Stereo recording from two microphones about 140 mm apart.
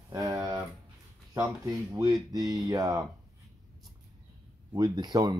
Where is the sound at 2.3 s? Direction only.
25° right (ahead or behind).